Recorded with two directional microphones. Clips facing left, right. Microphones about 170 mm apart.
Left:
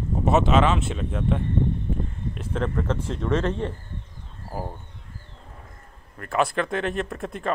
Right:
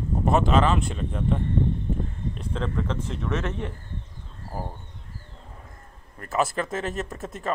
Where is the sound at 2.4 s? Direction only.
10° left (ahead or behind).